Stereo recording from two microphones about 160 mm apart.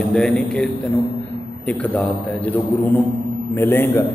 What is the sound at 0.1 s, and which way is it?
Speech, 5° left (ahead or behind).